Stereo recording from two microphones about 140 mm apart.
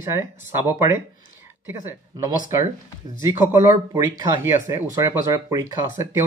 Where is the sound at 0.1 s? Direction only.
15° right (ahead or behind).